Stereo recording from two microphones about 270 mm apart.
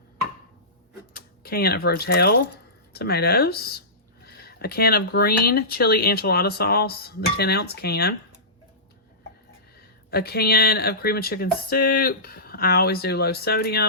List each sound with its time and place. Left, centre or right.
1.1 s speech: left
10.1 s speech: left